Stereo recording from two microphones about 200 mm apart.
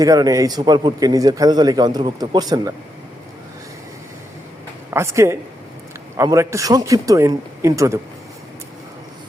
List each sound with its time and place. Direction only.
0.0 s a man's voice: 15° right (ahead or behind)
4.9 s a man's voice: 15° right (ahead or behind)